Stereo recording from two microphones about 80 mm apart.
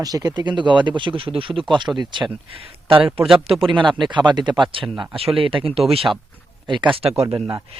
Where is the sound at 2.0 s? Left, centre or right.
Right.